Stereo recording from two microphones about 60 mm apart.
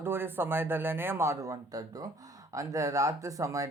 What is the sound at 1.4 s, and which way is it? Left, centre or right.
Speech, right.